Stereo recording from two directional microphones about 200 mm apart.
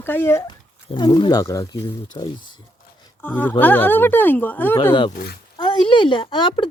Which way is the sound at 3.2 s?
10° left (ahead or behind).